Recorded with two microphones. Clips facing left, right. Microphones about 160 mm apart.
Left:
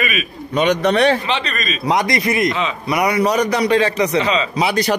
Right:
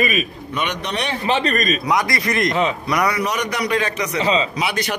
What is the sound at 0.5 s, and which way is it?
Speech, 45° left (ahead or behind).